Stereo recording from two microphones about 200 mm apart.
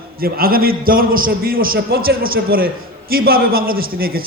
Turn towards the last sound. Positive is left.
turn(degrees=-50)  # may be behind; listen again after turning